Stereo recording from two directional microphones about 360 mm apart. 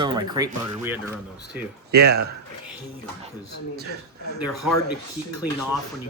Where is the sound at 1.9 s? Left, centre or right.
Right.